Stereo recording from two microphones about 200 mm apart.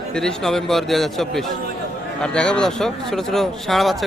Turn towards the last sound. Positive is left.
turn(degrees=0)  # may be behind; listen again after turning